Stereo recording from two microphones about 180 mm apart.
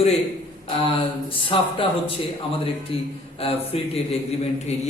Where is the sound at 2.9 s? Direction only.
30° left (ahead or behind).